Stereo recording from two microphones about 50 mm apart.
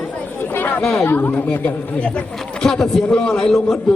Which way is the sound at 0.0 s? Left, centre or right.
Left.